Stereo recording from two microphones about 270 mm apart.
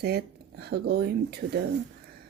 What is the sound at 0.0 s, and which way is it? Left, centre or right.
Speech, right.